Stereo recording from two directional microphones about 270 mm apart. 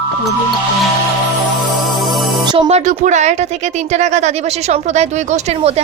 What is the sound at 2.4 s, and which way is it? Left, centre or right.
A woman's voice, centre.